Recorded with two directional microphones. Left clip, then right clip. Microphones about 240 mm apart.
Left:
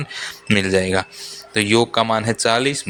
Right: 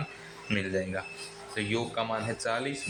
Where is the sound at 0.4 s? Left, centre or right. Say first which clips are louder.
Left 13 dB; left.